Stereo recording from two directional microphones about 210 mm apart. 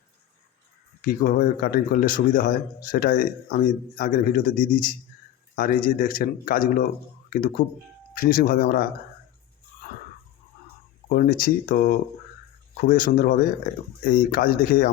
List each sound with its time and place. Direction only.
1.0 s a man's voice: 40° left (ahead or behind)
11.1 s a man's voice: 40° left (ahead or behind)